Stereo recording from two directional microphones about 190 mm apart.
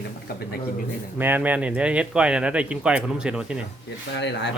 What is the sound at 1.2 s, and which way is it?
Speech, 10° right (ahead or behind).